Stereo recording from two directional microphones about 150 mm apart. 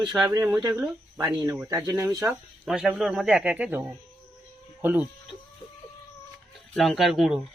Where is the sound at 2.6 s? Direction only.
Centre (ahead or behind).